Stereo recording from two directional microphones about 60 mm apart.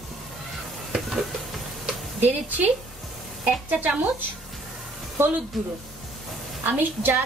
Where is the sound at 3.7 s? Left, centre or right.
Right.